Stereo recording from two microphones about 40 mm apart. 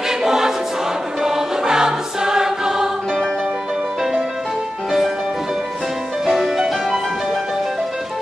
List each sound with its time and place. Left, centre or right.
0.2 s choir: centre
1.2 s music: centre
6.2 s music: centre